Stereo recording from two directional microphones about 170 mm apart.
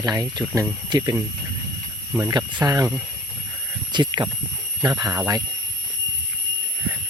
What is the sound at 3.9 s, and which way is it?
Speech, 25° right (ahead or behind).